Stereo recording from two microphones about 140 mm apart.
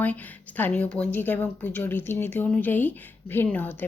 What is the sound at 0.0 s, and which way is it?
Speech, 10° left (ahead or behind).